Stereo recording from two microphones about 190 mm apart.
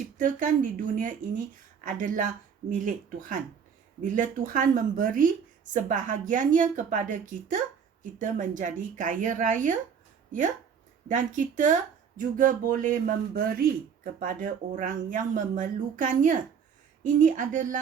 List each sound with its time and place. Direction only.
0.2 s a man's voice: 45° right (ahead or behind)
11.1 s a man's voice: 40° right (ahead or behind)